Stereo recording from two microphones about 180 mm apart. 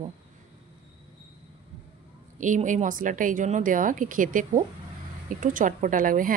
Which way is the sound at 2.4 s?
45° right (ahead or behind).